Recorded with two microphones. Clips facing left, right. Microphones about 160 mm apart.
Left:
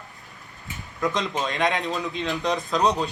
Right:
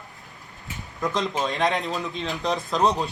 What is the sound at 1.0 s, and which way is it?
A man's voice, centre (ahead or behind).